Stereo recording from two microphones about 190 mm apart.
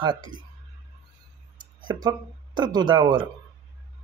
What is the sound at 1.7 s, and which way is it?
A man's voice, 20° right (ahead or behind).